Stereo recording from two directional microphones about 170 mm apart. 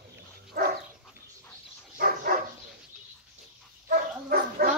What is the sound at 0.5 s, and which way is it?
Dog, 65° right (ahead or behind).